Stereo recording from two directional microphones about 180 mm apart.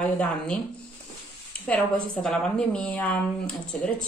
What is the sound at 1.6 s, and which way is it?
A woman's voice, 5° left (ahead or behind).